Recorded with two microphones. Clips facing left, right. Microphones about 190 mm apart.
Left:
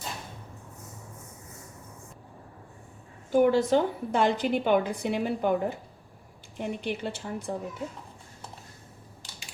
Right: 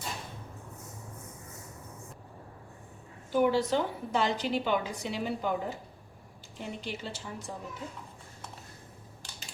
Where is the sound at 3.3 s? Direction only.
50° left (ahead or behind).